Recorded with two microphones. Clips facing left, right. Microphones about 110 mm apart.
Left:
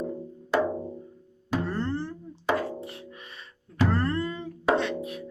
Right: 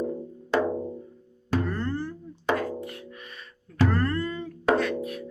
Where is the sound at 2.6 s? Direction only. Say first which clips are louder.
Right 1 dB; 30° left (ahead or behind).